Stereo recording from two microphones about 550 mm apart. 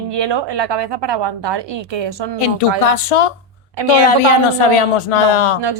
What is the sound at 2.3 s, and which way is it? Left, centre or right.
Speech, left.